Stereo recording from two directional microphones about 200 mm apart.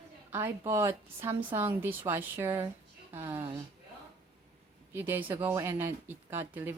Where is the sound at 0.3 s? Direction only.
10° right (ahead or behind).